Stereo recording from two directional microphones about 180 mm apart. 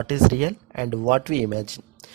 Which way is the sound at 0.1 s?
45° right (ahead or behind).